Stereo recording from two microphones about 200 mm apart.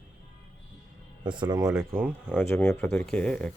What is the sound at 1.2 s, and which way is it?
Speech, 25° right (ahead or behind).